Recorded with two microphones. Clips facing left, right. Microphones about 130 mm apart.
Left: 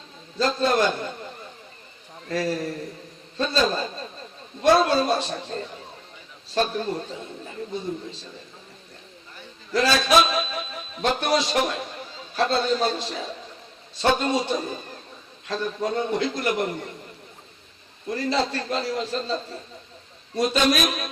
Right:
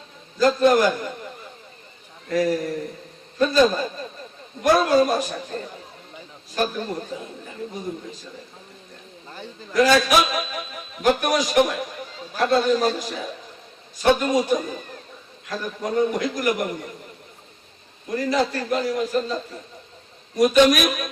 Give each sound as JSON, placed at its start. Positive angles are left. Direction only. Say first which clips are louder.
{"t": 0.3, "sound": "a man's voice", "louder": "right 5 dB", "side_deg": 30}
{"t": 2.3, "sound": "a man's voice", "louder": "right 4 dB", "side_deg": 30}
{"t": 9.7, "sound": "a man's voice", "louder": "right 2 dB", "side_deg": 30}
{"t": 18.1, "sound": "a man's voice", "louder": "right 2 dB", "side_deg": 30}